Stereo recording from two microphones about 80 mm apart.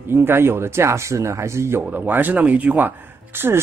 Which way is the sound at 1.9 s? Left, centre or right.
Right.